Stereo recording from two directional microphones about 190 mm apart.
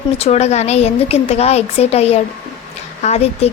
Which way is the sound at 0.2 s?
35° left (ahead or behind).